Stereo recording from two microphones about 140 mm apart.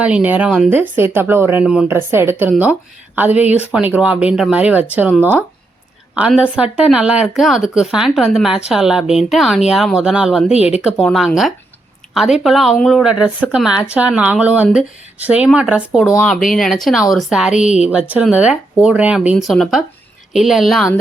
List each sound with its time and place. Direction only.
0.0 s speech: 10° right (ahead or behind)
6.1 s speech: 5° right (ahead or behind)